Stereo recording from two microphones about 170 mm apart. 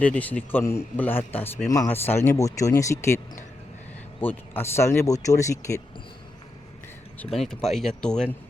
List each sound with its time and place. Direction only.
0.0 s a man's voice: 10° left (ahead or behind)
4.2 s a man's voice: 10° left (ahead or behind)
7.4 s speech: centre (ahead or behind)